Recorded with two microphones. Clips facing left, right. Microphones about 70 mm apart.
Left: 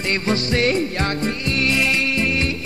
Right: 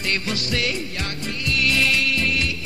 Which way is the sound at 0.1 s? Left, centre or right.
Left.